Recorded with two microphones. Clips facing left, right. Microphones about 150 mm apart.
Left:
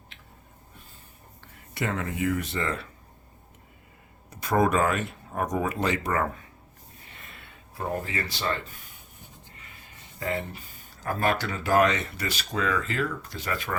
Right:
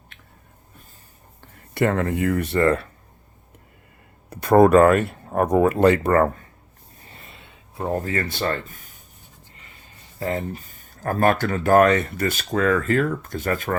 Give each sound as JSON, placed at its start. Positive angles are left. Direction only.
{"t": 1.7, "sound": "speech", "side_deg": -55}
{"t": 4.3, "sound": "speech", "side_deg": -55}
{"t": 7.9, "sound": "speech", "side_deg": -50}
{"t": 10.2, "sound": "speech", "side_deg": -40}